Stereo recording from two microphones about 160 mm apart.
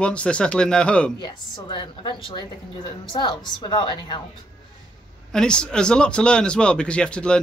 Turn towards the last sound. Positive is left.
turn(degrees=5)  # may be behind; listen again after turning